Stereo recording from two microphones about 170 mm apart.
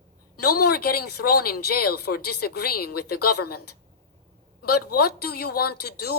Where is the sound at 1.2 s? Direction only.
65° left (ahead or behind).